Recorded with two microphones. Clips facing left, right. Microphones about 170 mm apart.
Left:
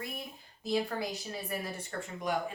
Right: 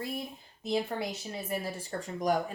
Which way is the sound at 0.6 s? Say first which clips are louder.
Right 1 dB; 25° right (ahead or behind).